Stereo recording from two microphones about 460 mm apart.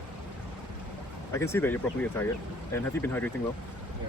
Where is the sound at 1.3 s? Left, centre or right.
Centre.